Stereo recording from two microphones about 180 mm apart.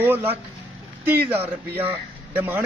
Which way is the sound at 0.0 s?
10° right (ahead or behind).